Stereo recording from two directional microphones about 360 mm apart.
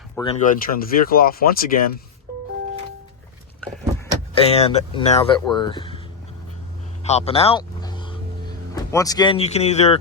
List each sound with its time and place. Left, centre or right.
0.2 s speech: centre
4.4 s speech: centre
7.0 s vehicle: centre